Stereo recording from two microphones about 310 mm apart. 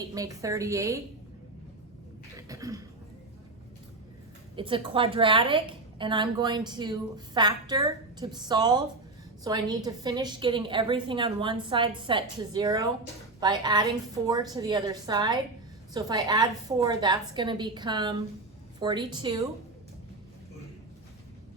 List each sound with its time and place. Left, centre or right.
0.1 s a woman's voice: centre
2.3 s cough: centre
4.5 s a woman's voice: centre